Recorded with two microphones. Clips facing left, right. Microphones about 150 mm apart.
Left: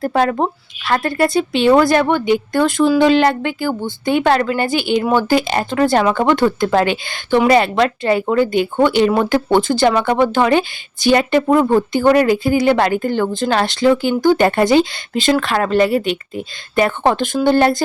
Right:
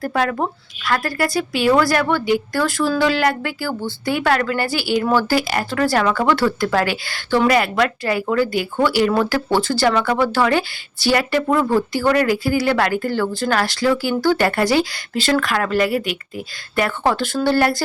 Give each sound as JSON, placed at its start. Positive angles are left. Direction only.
{"t": 0.0, "sound": "a woman's voice", "side_deg": 25}